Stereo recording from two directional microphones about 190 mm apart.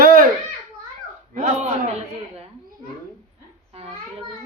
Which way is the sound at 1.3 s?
40° right (ahead or behind).